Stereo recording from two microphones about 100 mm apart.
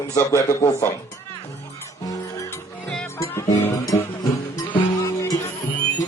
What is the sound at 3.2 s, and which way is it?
Music, 25° left (ahead or behind).